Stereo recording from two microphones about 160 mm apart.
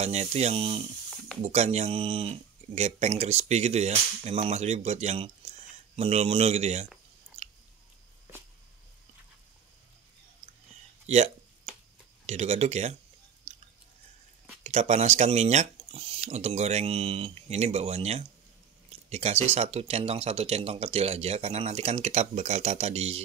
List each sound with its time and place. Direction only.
0.0 s speech: 45° right (ahead or behind)
11.1 s speech: 45° right (ahead or behind)
14.6 s speech: 45° right (ahead or behind)